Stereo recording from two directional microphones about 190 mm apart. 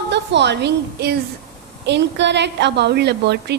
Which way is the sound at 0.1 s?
65° right (ahead or behind).